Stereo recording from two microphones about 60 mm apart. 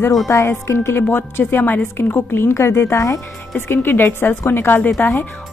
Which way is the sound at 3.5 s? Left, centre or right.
Left.